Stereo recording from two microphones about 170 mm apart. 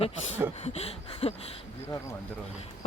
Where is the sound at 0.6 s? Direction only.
40° left (ahead or behind).